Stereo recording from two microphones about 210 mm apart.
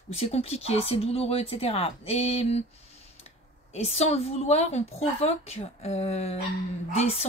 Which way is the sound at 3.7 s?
30° left (ahead or behind).